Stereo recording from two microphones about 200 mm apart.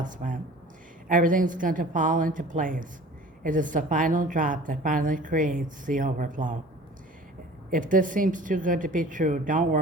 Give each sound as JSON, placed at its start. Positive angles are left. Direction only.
{"t": 0.0, "sound": "a woman's voice", "side_deg": -40}
{"t": 7.7, "sound": "a woman's voice", "side_deg": -40}